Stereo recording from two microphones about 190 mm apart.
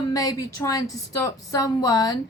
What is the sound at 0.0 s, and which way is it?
A woman's voice, 20° left (ahead or behind).